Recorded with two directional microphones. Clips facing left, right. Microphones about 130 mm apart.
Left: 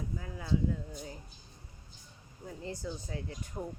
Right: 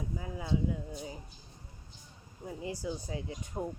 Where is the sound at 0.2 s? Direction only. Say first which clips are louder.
Even; 15° right (ahead or behind).